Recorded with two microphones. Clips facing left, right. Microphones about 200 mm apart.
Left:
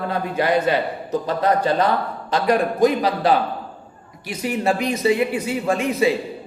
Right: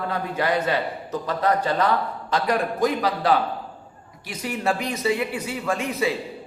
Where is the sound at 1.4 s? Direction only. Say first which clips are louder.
Left 2 dB; 20° left (ahead or behind).